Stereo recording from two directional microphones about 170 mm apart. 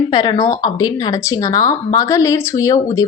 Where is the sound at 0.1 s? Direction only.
25° left (ahead or behind).